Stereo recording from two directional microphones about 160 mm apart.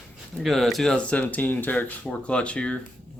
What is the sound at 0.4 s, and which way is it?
Speech, centre (ahead or behind).